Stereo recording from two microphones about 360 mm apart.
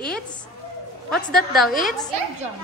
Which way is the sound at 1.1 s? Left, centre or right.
Centre.